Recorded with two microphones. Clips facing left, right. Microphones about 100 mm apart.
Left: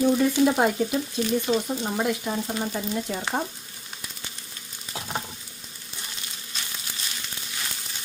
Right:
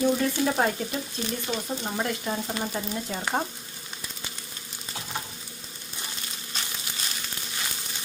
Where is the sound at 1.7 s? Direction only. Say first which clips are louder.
Left 3 dB; 5° left (ahead or behind).